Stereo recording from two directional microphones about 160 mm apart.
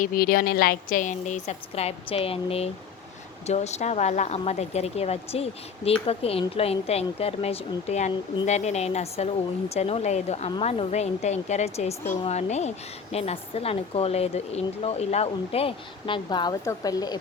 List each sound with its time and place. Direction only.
0.0 s a woman's voice: 65° left (ahead or behind); by 17.2 s 25° left (ahead or behind)